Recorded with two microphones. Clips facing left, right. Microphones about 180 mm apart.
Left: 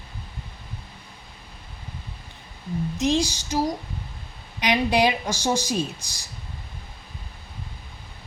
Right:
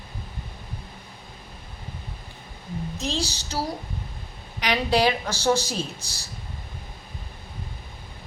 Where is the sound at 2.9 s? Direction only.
15° left (ahead or behind).